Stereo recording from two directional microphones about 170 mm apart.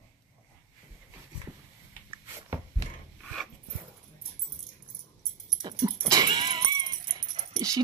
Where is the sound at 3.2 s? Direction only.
5° left (ahead or behind).